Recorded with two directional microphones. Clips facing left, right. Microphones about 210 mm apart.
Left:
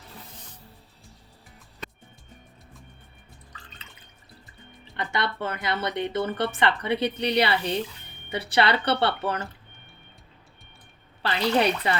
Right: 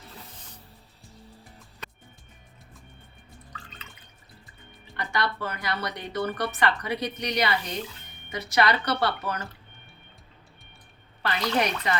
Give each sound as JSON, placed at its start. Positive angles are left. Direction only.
{"t": 4.9, "sound": "speech", "side_deg": 25}
{"t": 11.2, "sound": "speech", "side_deg": 30}